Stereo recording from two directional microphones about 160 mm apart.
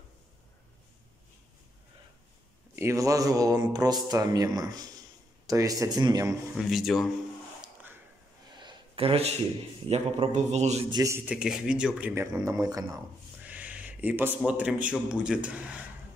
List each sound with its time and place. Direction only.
2.7 s speech: 15° right (ahead or behind)
6.5 s speech: centre (ahead or behind)
8.5 s a sound: 30° right (ahead or behind)
9.8 s a man's voice: 40° right (ahead or behind)
10.9 s speech: 20° right (ahead or behind)
11.2 s speech: 5° right (ahead or behind); by 13.0 s 20° right (ahead or behind)
13.4 s a man's voice: 10° right (ahead or behind)